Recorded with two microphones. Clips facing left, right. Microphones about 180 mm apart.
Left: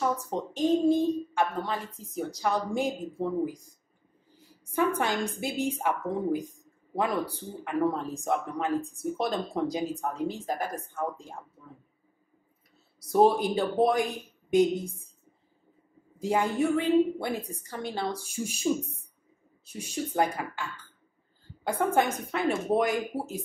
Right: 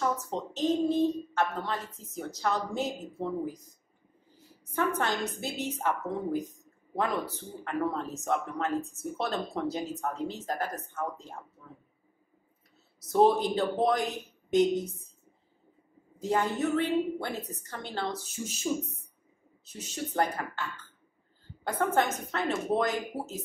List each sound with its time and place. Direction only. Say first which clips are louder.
0.0 s speech: left 2 dB; 10° left (ahead or behind)
4.6 s speech: left 2 dB; 10° left (ahead or behind)
13.0 s speech: left 1 dB; 10° left (ahead or behind)
16.2 s speech: left 2 dB; 10° left (ahead or behind)